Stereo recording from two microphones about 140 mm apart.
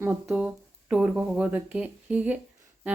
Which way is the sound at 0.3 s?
5° right (ahead or behind).